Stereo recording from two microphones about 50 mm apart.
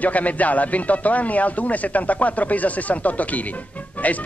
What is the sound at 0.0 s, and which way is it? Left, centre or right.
Speech, left.